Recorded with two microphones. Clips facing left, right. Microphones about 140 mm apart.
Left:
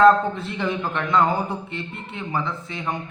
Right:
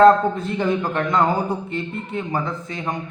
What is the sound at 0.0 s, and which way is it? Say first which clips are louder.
A man's voice: right 2 dB; 45° right (ahead or behind).